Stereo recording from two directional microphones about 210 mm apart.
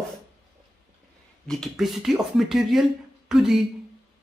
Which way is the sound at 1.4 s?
Centre (ahead or behind).